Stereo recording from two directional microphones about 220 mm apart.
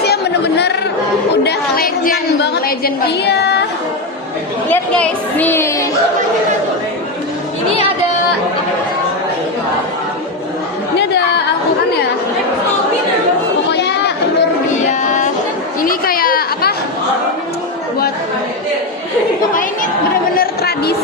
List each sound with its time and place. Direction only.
0.0 s chatter: 50° left (ahead or behind)
1.5 s a woman's voice: 45° left (ahead or behind)
4.7 s a woman's voice: 10° left (ahead or behind)
13.7 s chatter: 50° left (ahead or behind)
15.0 s a sound: 35° left (ahead or behind)
15.8 s chatter: 40° left (ahead or behind)
20.3 s a sound: 45° left (ahead or behind)